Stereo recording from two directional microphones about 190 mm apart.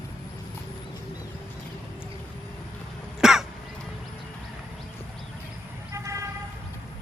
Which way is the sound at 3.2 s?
Centre (ahead or behind).